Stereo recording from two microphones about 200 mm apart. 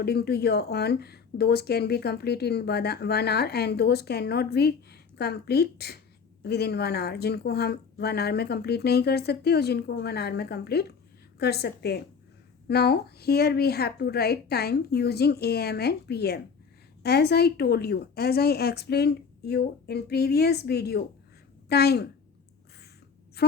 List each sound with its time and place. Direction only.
0.0 s a woman's voice: 55° left (ahead or behind)
23.4 s a woman's voice: 55° left (ahead or behind)